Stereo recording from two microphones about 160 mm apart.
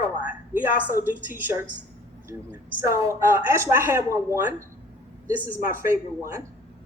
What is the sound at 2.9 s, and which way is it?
A woman's voice, 20° right (ahead or behind).